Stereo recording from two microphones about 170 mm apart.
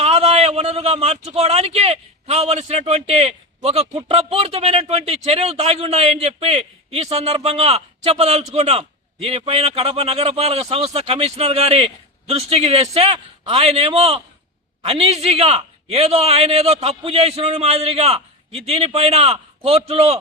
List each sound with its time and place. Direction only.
0.0 s speech: 35° right (ahead or behind)